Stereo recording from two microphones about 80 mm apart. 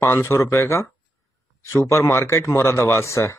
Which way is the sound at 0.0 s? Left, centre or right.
Left.